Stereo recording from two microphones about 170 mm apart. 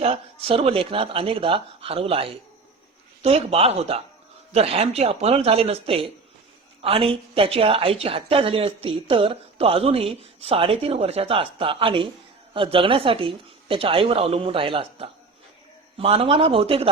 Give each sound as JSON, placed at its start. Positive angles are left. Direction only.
{"t": 0.0, "sound": "speech", "side_deg": -35}